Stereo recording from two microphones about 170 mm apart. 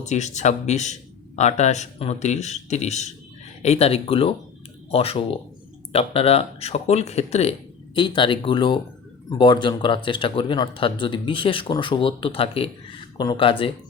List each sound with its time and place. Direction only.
0.0 s a man's voice: 45° left (ahead or behind)
7.9 s speech: 30° left (ahead or behind)